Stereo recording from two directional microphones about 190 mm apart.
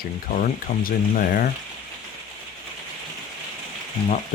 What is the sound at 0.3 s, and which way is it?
Speech, 45° left (ahead or behind).